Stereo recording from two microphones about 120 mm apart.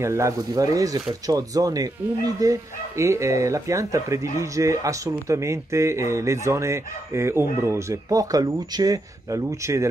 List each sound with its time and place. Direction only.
0.0 s speech: 25° right (ahead or behind)